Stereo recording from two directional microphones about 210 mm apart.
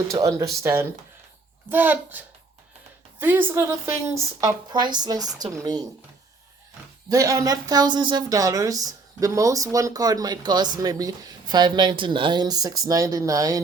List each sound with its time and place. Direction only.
0.1 s a woman's voice: 15° right (ahead or behind)
7.1 s a woman's voice: 15° right (ahead or behind)